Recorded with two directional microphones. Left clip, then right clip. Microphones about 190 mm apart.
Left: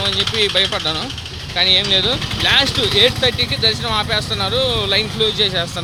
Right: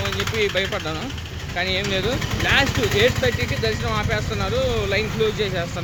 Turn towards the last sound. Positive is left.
turn(degrees=10)  # may be behind; listen again after turning